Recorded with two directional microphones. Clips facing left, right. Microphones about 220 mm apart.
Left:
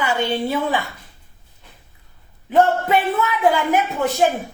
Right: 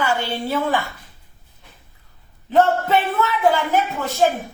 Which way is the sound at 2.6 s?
15° left (ahead or behind).